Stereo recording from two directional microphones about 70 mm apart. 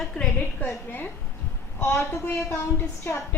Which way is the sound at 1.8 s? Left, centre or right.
Left.